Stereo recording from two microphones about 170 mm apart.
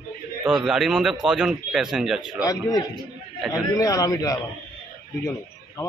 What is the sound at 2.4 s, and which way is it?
Speech, 20° left (ahead or behind).